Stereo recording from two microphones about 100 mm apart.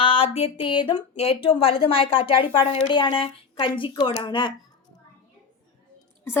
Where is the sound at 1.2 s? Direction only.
75° left (ahead or behind); by 4.5 s 50° left (ahead or behind).